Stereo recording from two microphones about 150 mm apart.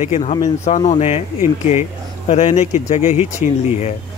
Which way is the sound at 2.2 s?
45° left (ahead or behind).